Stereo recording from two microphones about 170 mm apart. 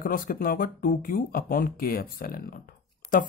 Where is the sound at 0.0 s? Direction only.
55° left (ahead or behind).